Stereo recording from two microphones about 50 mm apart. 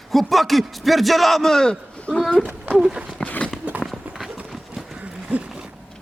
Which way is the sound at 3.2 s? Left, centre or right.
Left.